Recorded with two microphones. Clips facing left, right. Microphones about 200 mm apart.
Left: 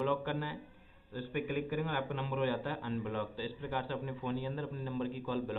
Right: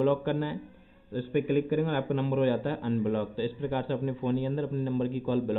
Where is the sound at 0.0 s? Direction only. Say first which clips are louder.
Right 8 dB; 30° right (ahead or behind).